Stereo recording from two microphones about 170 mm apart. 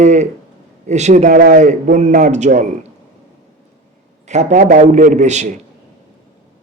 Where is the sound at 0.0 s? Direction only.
45° right (ahead or behind).